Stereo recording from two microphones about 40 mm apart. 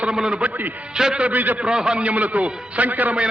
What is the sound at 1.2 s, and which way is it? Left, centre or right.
Speech, right.